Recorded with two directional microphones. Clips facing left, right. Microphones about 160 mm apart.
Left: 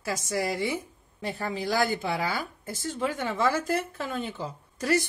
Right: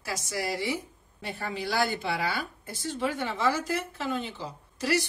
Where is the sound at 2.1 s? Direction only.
45° left (ahead or behind).